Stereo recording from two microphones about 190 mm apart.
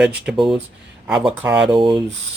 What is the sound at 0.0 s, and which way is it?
Speech, 5° right (ahead or behind).